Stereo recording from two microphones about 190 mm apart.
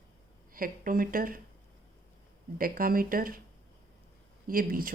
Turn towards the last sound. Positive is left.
turn(degrees=-50)  # may be behind; listen again after turning